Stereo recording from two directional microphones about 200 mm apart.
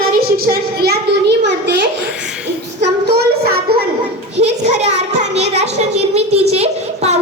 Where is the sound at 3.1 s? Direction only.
55° right (ahead or behind).